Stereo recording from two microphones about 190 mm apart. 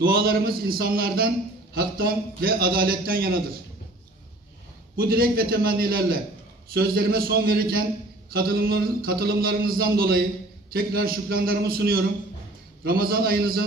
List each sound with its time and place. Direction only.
0.0 s a man's voice: 50° right (ahead or behind)
4.9 s a man's voice: 50° right (ahead or behind)